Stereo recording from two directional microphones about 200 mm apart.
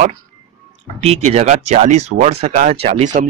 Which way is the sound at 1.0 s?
30° right (ahead or behind).